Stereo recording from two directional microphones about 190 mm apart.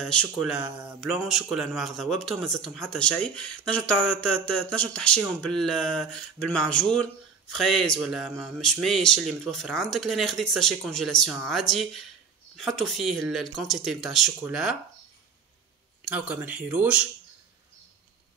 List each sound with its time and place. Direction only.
0.0 s a man's voice: 5° left (ahead or behind)
16.0 s speech: 5° right (ahead or behind)